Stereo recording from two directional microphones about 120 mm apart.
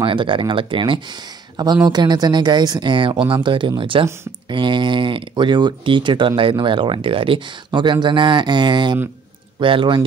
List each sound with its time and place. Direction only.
0.0 s speech: 45° right (ahead or behind)